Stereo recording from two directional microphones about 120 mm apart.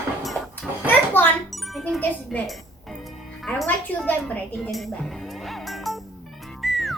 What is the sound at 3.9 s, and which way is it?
Speech, 15° left (ahead or behind).